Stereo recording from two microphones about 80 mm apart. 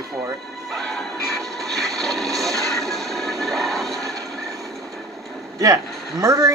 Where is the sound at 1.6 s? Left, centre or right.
Centre.